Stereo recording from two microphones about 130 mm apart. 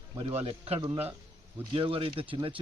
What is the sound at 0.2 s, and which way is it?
A man's voice, 45° right (ahead or behind).